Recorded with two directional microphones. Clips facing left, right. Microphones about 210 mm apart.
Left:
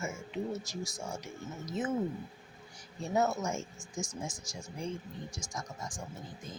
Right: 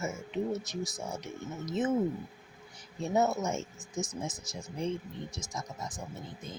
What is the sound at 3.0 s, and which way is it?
Speech, 20° right (ahead or behind).